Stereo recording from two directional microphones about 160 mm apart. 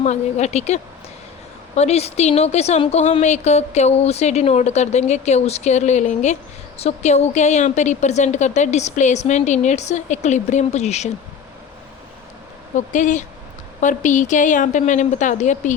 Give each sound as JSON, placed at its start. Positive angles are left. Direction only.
{"t": 0.0, "sound": "a woman's voice", "side_deg": 45}
{"t": 12.7, "sound": "a woman's voice", "side_deg": 50}